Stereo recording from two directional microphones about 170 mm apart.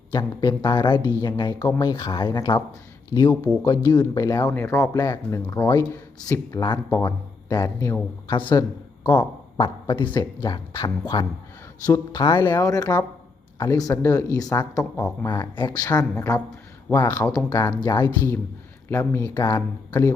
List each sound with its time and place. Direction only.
0.1 s speech: 25° left (ahead or behind)